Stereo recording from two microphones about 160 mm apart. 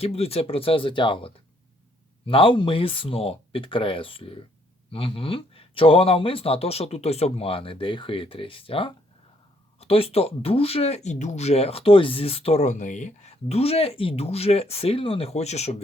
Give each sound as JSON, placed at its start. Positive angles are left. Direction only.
{"t": 0.0, "sound": "speech", "side_deg": 40}